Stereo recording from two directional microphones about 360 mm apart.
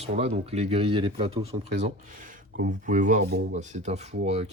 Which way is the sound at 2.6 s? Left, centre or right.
Right.